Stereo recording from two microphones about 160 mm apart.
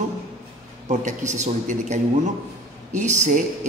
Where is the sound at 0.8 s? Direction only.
50° right (ahead or behind).